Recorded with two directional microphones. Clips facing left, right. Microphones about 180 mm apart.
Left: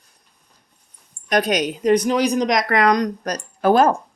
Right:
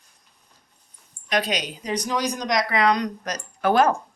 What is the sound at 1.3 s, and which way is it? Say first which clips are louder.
Speech: left 6 dB; 45° left (ahead or behind).